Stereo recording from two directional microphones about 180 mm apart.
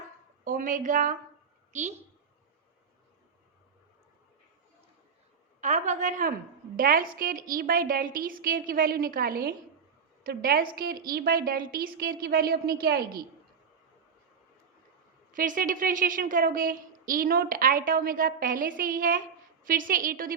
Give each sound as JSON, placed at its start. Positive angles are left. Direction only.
{"t": 0.4, "sound": "a woman's voice", "side_deg": -50}
{"t": 5.5, "sound": "a woman's voice", "side_deg": -40}
{"t": 15.3, "sound": "a woman's voice", "side_deg": -50}